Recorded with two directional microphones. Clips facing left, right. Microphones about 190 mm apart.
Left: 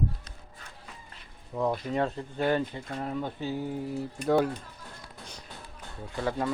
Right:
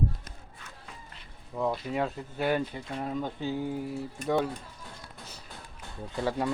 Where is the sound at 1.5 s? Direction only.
Centre (ahead or behind); by 3.7 s 15° right (ahead or behind).